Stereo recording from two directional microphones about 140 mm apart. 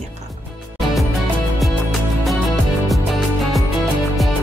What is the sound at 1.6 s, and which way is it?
Music, centre (ahead or behind).